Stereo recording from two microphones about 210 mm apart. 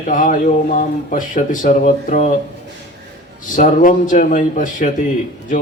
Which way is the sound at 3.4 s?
40° left (ahead or behind).